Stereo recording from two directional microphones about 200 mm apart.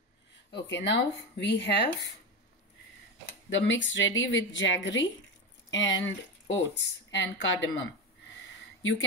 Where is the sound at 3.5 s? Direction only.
65° left (ahead or behind).